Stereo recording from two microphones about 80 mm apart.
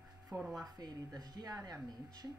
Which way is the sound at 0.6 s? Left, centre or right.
Right.